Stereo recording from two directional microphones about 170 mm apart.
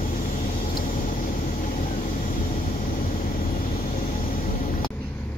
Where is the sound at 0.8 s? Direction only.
50° left (ahead or behind).